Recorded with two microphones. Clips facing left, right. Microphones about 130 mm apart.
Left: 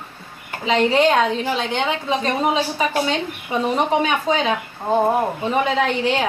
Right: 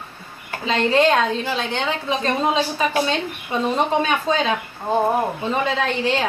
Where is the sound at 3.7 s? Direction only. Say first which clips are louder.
Left 1 dB; 15° left (ahead or behind).